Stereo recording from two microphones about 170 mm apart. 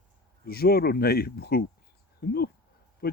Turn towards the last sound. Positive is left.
turn(degrees=60)  # may be behind; listen again after turning